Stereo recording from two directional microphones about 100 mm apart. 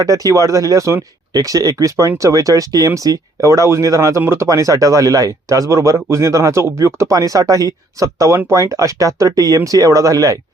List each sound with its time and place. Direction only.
0.0 s speech: 35° right (ahead or behind)